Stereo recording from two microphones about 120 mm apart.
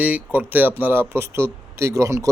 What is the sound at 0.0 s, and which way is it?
A man's voice, 10° right (ahead or behind).